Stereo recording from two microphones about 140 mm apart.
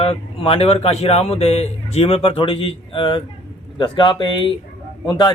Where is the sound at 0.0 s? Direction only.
40° left (ahead or behind).